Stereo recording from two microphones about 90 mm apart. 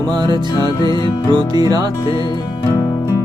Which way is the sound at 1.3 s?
50° right (ahead or behind).